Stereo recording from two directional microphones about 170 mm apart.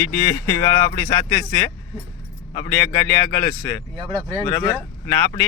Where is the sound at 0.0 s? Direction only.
15° left (ahead or behind).